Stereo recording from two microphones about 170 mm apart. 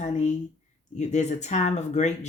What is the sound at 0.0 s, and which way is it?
Speech, 45° left (ahead or behind).